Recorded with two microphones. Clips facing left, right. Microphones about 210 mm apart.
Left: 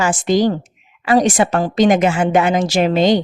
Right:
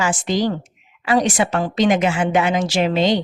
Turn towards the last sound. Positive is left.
turn(degrees=45)  # may be behind; listen again after turning